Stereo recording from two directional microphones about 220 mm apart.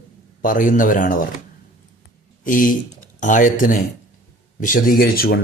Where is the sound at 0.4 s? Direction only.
35° left (ahead or behind).